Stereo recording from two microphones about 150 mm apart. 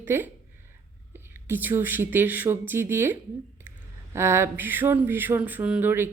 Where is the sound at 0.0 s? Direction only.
15° right (ahead or behind).